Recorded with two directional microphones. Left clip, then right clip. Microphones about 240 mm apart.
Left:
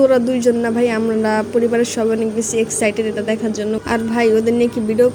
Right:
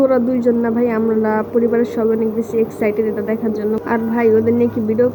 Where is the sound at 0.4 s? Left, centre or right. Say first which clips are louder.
Left 1 dB; left.